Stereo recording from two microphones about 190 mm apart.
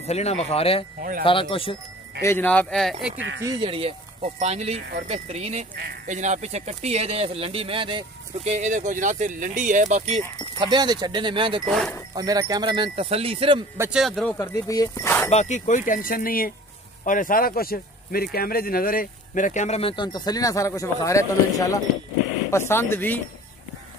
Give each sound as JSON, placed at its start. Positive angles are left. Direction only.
{"t": 0.0, "sound": "speech", "side_deg": 35}
{"t": 2.2, "sound": "speech", "side_deg": 10}
{"t": 3.2, "sound": "speech", "side_deg": -75}
{"t": 3.4, "sound": "speech", "side_deg": -25}
{"t": 8.5, "sound": "speech", "side_deg": -40}
{"t": 10.6, "sound": "speech", "side_deg": -25}
{"t": 11.6, "sound": "speech", "side_deg": 0}
{"t": 12.1, "sound": "speech", "side_deg": -20}
{"t": 13.7, "sound": "speech", "side_deg": -5}
{"t": 14.3, "sound": "speech", "side_deg": 15}
{"t": 15.2, "sound": "speech", "side_deg": 35}